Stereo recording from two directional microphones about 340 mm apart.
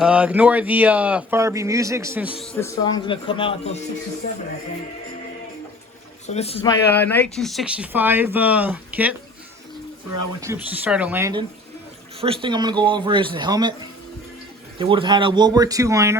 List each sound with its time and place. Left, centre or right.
0.0 s speech: centre
2.5 s speech: centre
6.2 s speech: centre
6.9 s speech: centre
10.4 s speech: centre
14.8 s speech: centre